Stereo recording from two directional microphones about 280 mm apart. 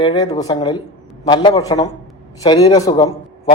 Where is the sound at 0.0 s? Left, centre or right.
Centre.